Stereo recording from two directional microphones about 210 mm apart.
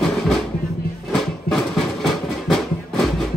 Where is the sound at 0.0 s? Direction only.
Centre (ahead or behind).